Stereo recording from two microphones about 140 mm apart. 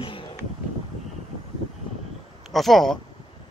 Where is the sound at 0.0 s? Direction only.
40° left (ahead or behind).